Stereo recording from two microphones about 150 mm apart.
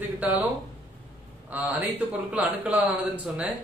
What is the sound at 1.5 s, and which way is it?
A man's voice, 10° right (ahead or behind).